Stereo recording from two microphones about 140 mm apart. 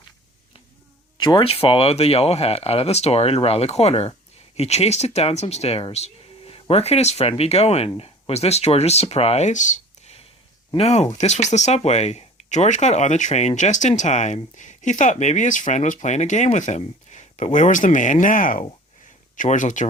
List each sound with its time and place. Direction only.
1.2 s speech: 35° left (ahead or behind); by 19.9 s 65° left (ahead or behind)